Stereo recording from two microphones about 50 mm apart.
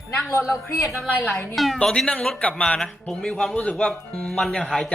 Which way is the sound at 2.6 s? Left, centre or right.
Centre.